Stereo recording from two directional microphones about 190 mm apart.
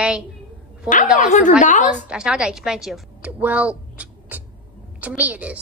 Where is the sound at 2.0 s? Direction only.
5° right (ahead or behind).